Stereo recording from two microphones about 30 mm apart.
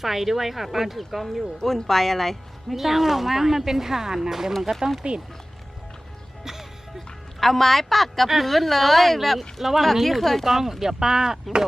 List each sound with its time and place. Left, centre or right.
0.0 s speech: centre
2.7 s speech: centre
5.0 s speech: right
6.4 s music: centre
7.3 s a woman's voice: centre
10.4 s speech: centre